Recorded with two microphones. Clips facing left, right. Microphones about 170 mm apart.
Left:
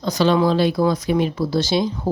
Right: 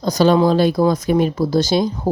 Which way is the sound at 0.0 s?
40° right (ahead or behind).